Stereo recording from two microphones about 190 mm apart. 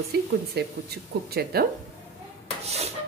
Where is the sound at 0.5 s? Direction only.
55° right (ahead or behind).